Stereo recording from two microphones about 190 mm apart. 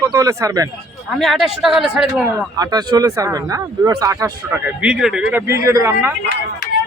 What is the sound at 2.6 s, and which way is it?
Speech, 20° right (ahead or behind).